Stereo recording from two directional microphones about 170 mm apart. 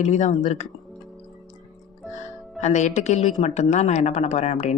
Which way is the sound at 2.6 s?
45° left (ahead or behind).